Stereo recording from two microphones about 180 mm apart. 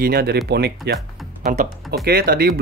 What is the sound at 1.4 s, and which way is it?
Speech, 50° right (ahead or behind).